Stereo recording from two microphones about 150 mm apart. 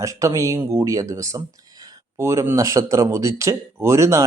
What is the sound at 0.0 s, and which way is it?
Speech, 20° right (ahead or behind).